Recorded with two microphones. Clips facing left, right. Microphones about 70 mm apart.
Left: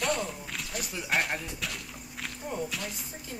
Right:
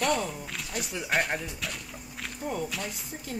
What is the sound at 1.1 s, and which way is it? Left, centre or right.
Speech, centre.